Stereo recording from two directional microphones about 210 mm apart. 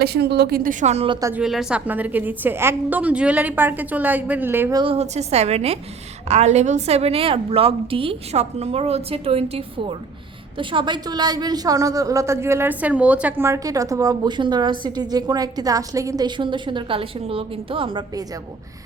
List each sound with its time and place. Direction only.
0.0 s a woman's voice: 50° right (ahead or behind); by 1.3 s 25° right (ahead or behind)
1.3 s a woman's voice: centre (ahead or behind)
4.8 s a woman's voice: 30° right (ahead or behind)